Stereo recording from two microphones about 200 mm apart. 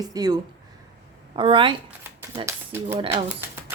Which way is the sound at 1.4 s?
25° right (ahead or behind).